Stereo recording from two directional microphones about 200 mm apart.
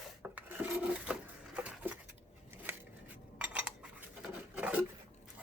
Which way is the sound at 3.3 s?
5° right (ahead or behind).